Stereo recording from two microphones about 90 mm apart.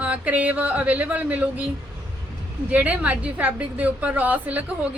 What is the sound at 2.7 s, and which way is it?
A woman's voice, 15° right (ahead or behind).